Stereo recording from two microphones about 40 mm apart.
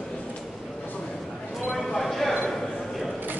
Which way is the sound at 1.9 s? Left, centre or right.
Centre.